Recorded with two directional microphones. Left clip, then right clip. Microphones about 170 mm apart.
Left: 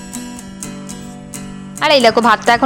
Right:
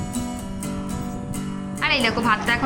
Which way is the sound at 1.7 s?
40° left (ahead or behind).